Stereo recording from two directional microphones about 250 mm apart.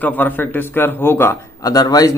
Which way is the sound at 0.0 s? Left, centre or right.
Centre.